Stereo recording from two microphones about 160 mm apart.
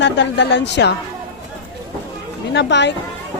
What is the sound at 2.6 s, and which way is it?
Speech, 90° left.